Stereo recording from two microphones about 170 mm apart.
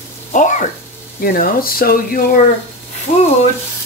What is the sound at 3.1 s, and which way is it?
Speech, 50° left (ahead or behind).